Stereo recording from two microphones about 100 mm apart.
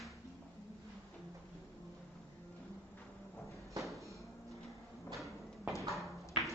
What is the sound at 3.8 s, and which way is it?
Music, centre (ahead or behind).